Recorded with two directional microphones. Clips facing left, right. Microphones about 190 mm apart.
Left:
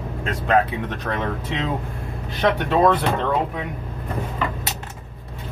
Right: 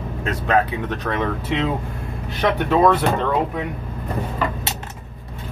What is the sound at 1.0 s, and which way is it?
Speech, 5° right (ahead or behind).